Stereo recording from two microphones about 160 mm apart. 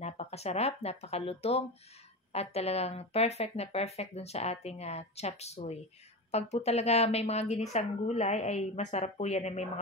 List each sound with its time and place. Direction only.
0.0 s speech: 40° left (ahead or behind)